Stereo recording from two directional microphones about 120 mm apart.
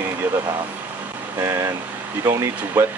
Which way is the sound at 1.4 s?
25° right (ahead or behind).